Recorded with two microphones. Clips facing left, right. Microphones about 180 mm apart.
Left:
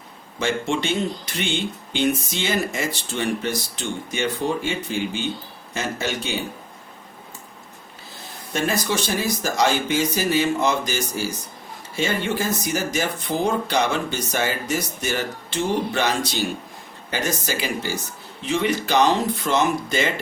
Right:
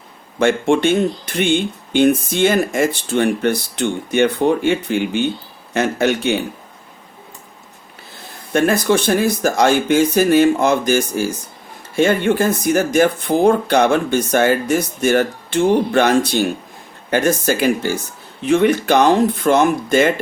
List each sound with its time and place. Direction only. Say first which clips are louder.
0.3 s speech: right 9 dB; 55° right (ahead or behind)
8.5 s speech: right 8 dB; 55° right (ahead or behind)